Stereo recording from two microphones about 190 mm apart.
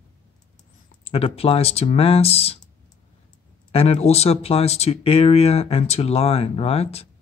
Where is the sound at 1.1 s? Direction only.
30° left (ahead or behind).